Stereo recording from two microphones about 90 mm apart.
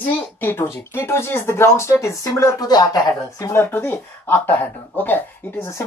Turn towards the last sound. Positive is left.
turn(degrees=20)  # may be behind; listen again after turning